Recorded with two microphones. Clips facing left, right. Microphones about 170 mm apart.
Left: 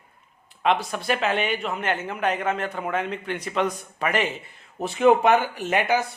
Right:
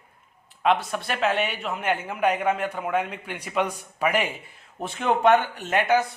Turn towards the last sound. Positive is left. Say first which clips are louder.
# right 1 dB
turn(degrees=0)  # may be behind; listen again after turning